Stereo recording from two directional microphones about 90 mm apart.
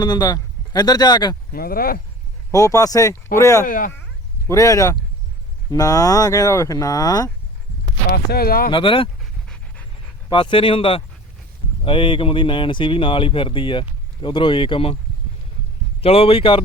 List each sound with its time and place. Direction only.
0.0 s speech: 50° left (ahead or behind)
2.5 s speech: 40° left (ahead or behind)
8.7 s speech: 70° left (ahead or behind)
10.2 s speech: 60° left (ahead or behind); by 11.0 s 85° left
11.9 s speech: 70° left (ahead or behind)
16.0 s speech: 90° left